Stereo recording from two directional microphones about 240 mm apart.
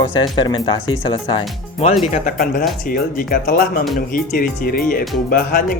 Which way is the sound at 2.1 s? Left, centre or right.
Left.